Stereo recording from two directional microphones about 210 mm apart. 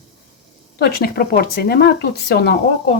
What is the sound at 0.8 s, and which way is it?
Speech, 45° left (ahead or behind).